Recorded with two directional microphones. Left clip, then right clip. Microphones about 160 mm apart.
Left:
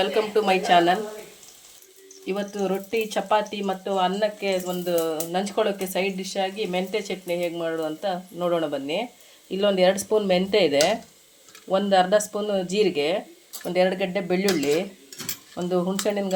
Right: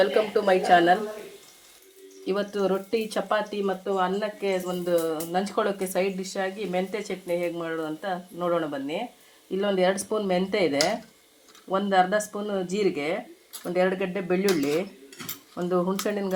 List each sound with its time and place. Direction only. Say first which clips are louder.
0.0 s speech: even; 25° left (ahead or behind)
2.2 s speech: right 1 dB; 5° left (ahead or behind)
3.8 s speech: left 6 dB; 30° left (ahead or behind)